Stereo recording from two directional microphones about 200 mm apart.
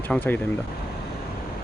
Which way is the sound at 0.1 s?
5° left (ahead or behind).